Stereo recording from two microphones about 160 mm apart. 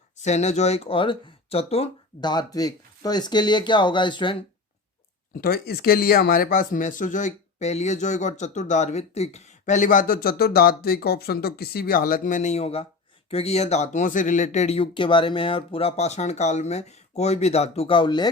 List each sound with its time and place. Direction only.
0.3 s speech: 45° left (ahead or behind)
5.4 s speech: 75° left (ahead or behind); by 18.3 s 30° left (ahead or behind)